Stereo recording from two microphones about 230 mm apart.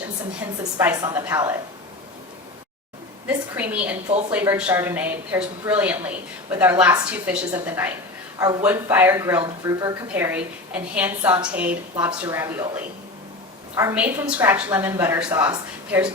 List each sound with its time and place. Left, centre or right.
0.3 s a woman's voice: centre
3.2 s a woman's voice: centre